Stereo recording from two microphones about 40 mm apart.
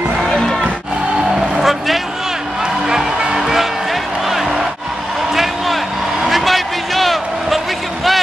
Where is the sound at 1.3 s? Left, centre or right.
Centre.